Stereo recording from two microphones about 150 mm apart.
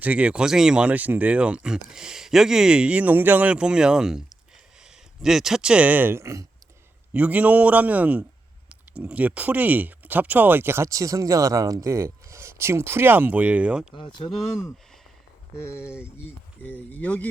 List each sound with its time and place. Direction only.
0.0 s speech: 10° right (ahead or behind)
13.9 s speech: 35° left (ahead or behind)
15.7 s speech: 15° left (ahead or behind)